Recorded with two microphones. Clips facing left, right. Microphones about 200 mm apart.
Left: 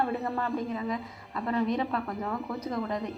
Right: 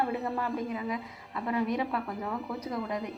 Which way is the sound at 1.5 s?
10° right (ahead or behind).